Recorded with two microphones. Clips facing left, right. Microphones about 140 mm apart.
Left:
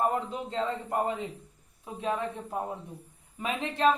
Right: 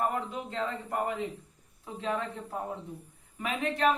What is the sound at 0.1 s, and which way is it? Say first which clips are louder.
A man's voice: left 3 dB; 25° left (ahead or behind).